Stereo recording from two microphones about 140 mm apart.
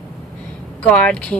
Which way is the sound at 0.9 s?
10° left (ahead or behind).